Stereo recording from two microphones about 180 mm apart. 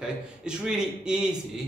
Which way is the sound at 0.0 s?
5° right (ahead or behind).